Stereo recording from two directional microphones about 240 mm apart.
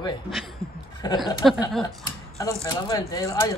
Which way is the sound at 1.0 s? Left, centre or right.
Centre.